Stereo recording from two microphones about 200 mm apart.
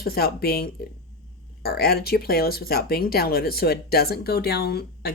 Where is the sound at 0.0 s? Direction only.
50° left (ahead or behind).